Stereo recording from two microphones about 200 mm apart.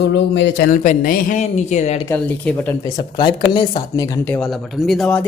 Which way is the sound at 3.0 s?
20° left (ahead or behind).